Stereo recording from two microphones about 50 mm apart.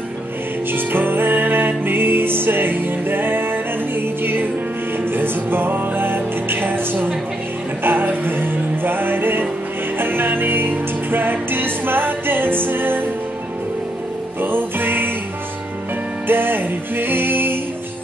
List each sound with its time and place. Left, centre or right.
0.7 s music: right
14.4 s music: right
16.3 s music: right